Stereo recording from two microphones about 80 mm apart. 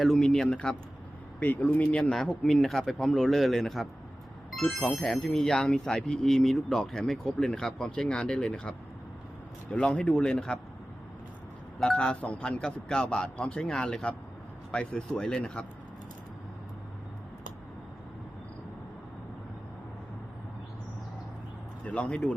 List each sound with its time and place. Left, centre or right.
0.0 s a man's voice: centre
9.7 s a man's voice: centre
11.8 s a man's voice: centre
21.8 s speech: centre